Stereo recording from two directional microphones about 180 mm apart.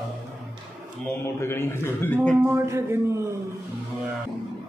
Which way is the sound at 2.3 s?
15° right (ahead or behind).